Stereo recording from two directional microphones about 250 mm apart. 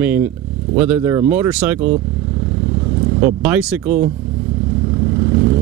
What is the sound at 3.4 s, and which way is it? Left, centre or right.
Speech, centre.